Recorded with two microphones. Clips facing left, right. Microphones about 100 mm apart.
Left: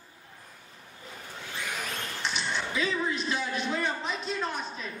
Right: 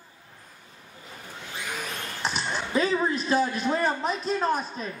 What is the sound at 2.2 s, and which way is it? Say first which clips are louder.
A man's voice: right 3 dB; 40° right (ahead or behind).